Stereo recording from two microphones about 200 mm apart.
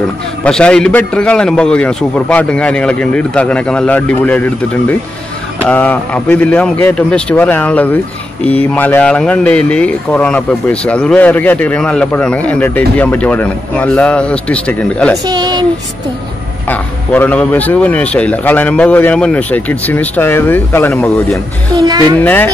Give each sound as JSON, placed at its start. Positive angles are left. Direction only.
{"t": 0.4, "sound": "a man's voice", "side_deg": 5}
{"t": 15.2, "sound": "speech", "side_deg": -20}
{"t": 16.6, "sound": "speech", "side_deg": 10}
{"t": 21.7, "sound": "speech", "side_deg": -20}
{"t": 22.2, "sound": "speech", "side_deg": 10}